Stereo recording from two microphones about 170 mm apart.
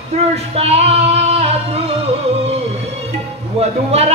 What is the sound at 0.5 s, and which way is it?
Music, 35° right (ahead or behind).